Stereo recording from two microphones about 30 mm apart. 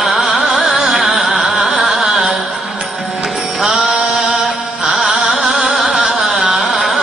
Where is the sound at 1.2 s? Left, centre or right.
Centre.